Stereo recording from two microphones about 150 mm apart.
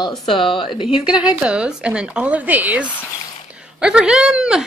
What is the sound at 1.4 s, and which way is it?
A woman's voice, 5° right (ahead or behind).